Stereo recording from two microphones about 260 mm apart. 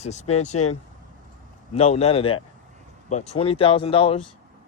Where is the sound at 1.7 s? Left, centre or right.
Left.